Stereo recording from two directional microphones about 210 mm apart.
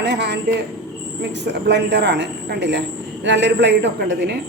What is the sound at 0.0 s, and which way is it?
Speech, 55° right (ahead or behind).